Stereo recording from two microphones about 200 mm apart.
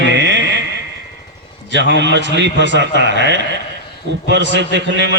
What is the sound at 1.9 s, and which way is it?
A man's voice, 65° right (ahead or behind).